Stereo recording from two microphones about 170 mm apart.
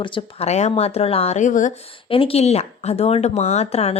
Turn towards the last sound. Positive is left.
turn(degrees=40)  # may be behind; listen again after turning